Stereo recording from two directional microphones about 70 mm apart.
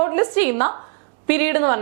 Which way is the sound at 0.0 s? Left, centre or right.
Right.